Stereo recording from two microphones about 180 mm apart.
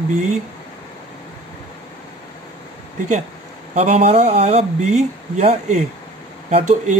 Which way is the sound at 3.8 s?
40° right (ahead or behind).